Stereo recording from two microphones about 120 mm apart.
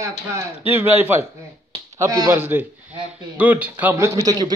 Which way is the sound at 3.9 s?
25° right (ahead or behind).